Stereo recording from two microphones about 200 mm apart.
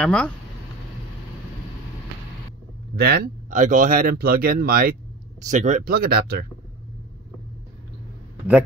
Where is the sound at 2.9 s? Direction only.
50° right (ahead or behind).